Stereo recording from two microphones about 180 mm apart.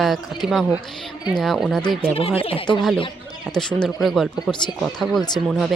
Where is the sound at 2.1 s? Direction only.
30° left (ahead or behind).